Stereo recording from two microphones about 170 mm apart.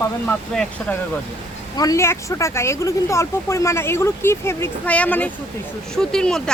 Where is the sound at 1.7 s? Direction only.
20° left (ahead or behind).